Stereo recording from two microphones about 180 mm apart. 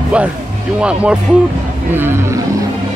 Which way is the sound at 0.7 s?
5° right (ahead or behind).